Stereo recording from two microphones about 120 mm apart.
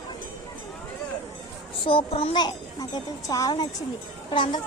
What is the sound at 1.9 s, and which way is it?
Speech, 50° left (ahead or behind).